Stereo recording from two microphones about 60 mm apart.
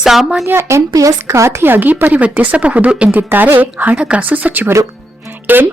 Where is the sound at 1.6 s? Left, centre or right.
Right.